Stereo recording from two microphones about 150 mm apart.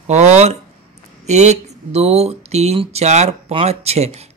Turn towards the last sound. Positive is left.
turn(degrees=-45)  # may be behind; listen again after turning